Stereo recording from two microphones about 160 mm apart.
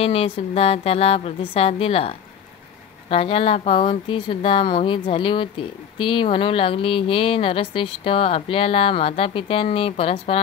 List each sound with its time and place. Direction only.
0.0 s speech: 40° left (ahead or behind)